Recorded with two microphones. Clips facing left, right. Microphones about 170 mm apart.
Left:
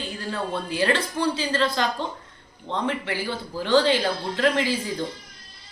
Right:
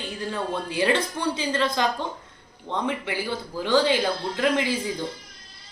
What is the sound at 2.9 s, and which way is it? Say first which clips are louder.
Speech: even; 10° right (ahead or behind).